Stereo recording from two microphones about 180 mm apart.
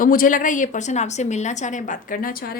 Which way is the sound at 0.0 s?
50° left (ahead or behind).